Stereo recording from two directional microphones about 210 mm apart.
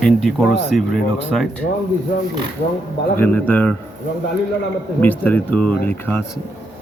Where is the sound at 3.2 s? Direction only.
10° left (ahead or behind).